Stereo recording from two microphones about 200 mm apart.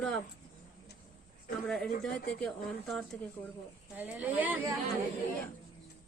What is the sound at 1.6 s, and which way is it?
Speech, centre (ahead or behind).